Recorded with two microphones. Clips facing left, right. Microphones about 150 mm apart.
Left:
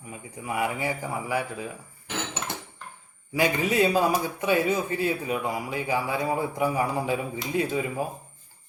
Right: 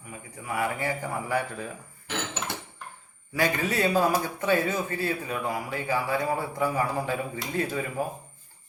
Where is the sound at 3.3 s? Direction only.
15° left (ahead or behind).